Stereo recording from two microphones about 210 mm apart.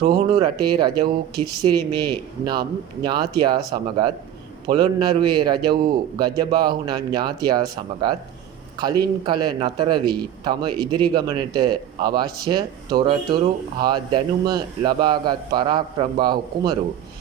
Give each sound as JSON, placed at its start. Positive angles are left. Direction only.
{"t": 0.0, "sound": "a man's voice", "side_deg": -20}